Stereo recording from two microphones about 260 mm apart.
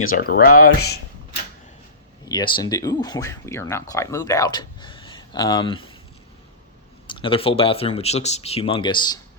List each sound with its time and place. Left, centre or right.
0.2 s speech: left
2.3 s speech: centre
7.1 s speech: centre